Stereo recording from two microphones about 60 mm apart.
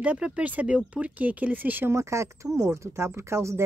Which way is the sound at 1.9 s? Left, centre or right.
Right.